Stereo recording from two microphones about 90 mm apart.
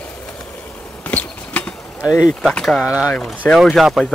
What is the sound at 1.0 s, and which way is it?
Clip-clop, 15° left (ahead or behind).